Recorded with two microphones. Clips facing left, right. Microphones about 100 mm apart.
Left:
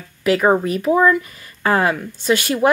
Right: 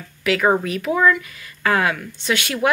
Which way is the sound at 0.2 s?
40° left (ahead or behind).